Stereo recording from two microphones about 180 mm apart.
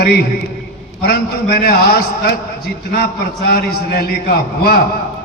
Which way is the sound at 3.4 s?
60° left (ahead or behind).